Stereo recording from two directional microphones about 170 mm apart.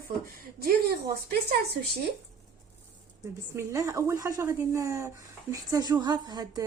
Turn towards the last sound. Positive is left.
turn(degrees=-25)  # may be behind; listen again after turning